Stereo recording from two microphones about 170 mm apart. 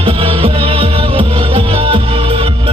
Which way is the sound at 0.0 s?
35° right (ahead or behind).